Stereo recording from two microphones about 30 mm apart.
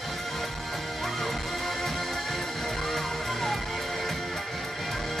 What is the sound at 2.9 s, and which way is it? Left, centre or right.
Music, centre.